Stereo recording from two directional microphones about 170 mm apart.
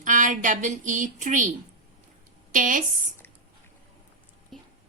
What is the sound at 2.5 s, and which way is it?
Speech, 50° right (ahead or behind).